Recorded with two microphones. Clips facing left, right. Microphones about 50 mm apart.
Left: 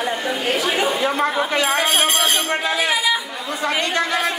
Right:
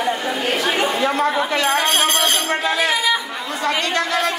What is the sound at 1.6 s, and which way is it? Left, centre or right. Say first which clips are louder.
Music: right 1 dB; centre.